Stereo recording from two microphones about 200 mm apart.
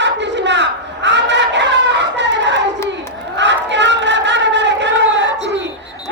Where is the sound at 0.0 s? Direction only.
60° right (ahead or behind).